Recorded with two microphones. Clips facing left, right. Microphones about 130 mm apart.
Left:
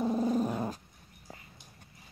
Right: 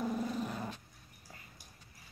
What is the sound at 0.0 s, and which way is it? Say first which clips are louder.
Growling: left 7 dB; 30° left (ahead or behind).